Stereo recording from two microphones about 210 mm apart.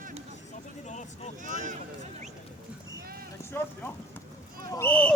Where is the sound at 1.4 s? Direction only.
35° right (ahead or behind).